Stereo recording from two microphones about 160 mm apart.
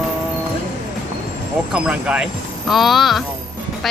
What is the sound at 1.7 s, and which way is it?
A woman's voice, 5° right (ahead or behind).